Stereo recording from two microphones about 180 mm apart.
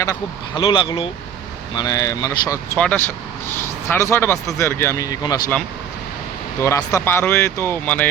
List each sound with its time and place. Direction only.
0.0 s speech: 20° left (ahead or behind)
2.7 s speech: 5° left (ahead or behind)
6.6 s speech: 15° left (ahead or behind)